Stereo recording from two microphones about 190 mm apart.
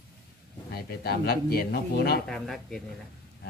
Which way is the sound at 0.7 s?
55° left (ahead or behind).